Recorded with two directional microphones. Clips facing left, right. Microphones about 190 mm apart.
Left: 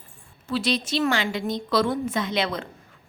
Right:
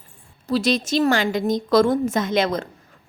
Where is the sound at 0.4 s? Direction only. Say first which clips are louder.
Right 5 dB; 40° right (ahead or behind).